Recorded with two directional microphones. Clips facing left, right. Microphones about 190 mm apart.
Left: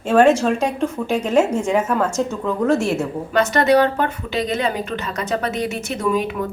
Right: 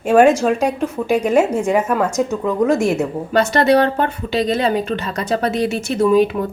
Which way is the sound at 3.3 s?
30° right (ahead or behind).